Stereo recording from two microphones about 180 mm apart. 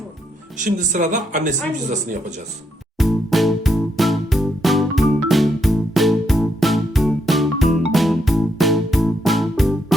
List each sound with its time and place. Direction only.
0.6 s speech: 45° right (ahead or behind)
3.0 s music: centre (ahead or behind)